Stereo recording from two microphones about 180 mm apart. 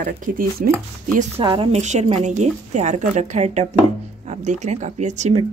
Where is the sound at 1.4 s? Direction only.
30° right (ahead or behind).